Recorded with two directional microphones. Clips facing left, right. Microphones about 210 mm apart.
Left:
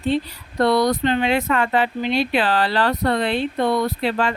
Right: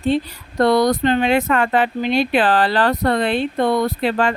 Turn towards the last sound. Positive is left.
turn(degrees=-50)  # may be behind; listen again after turning